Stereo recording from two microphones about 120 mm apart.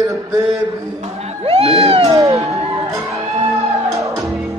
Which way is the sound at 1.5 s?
55° right (ahead or behind).